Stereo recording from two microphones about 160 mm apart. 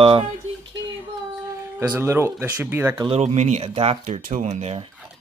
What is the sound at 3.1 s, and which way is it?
Speech, 40° right (ahead or behind).